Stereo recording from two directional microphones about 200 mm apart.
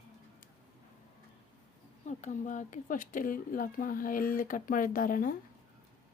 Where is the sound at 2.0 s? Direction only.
35° left (ahead or behind).